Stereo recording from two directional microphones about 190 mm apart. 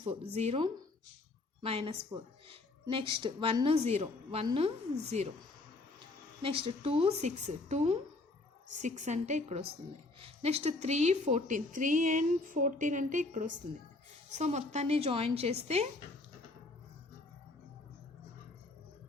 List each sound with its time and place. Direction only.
0.0 s a woman's voice: 30° right (ahead or behind)
6.4 s speech: 30° right (ahead or behind)